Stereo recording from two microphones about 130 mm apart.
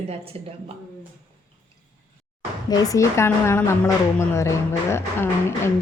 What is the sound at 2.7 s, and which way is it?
Speech, 30° left (ahead or behind).